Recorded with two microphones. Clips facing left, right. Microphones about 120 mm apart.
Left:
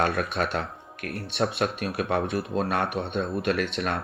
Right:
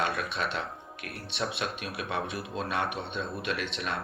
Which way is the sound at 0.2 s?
45° left (ahead or behind).